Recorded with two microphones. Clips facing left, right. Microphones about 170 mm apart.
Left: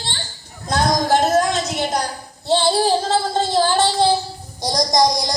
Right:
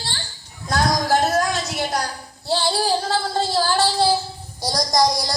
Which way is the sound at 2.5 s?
20° left (ahead or behind).